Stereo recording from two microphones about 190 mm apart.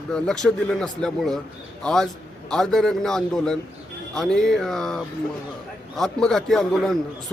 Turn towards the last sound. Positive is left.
turn(degrees=0)  # may be behind; listen again after turning